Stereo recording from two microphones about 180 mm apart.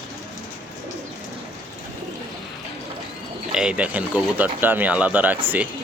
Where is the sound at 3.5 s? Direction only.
5° right (ahead or behind).